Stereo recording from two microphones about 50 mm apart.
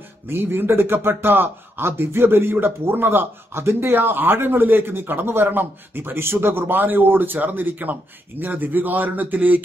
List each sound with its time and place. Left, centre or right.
0.3 s speech: right